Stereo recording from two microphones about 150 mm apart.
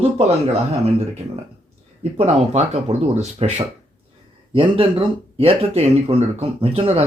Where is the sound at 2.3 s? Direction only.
45° right (ahead or behind).